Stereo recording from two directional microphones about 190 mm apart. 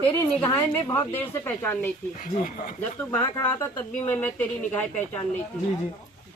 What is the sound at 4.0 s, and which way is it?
Speech, 10° left (ahead or behind).